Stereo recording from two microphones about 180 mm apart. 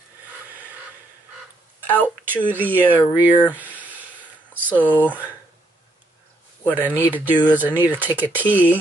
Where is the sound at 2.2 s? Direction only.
10° right (ahead or behind).